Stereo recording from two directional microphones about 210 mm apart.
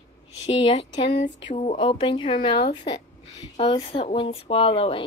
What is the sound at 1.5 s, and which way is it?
Speech, 30° left (ahead or behind).